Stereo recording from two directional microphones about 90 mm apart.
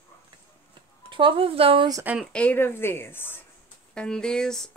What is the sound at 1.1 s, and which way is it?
Speech, 80° right.